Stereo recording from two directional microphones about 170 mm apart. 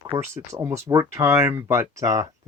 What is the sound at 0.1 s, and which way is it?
Speech, 15° right (ahead or behind).